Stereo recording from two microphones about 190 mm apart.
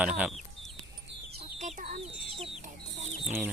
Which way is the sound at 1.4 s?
35° right (ahead or behind).